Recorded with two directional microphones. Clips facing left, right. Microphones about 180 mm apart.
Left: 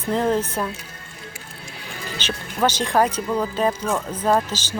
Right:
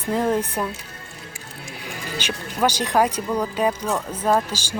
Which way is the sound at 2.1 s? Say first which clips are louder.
Even; 10° right (ahead or behind).